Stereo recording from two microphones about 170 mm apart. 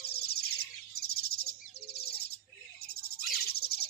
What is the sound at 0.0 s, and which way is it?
Bird, 70° left (ahead or behind).